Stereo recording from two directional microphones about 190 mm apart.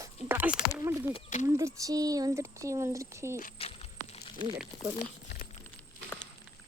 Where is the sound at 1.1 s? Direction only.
40° left (ahead or behind).